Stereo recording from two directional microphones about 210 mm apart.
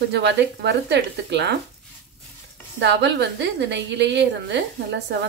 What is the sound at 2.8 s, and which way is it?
A woman's voice, 55° right (ahead or behind).